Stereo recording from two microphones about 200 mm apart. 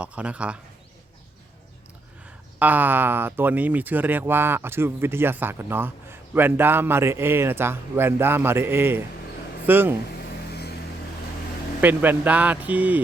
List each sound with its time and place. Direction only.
0.0 s speech: 5° right (ahead or behind)
2.6 s speech: 10° right (ahead or behind)
10.2 s vehicle: 55° left (ahead or behind)
11.8 s speech: 10° right (ahead or behind)